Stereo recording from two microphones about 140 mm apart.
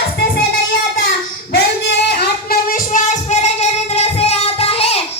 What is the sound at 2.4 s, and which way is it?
Music, 75° left (ahead or behind).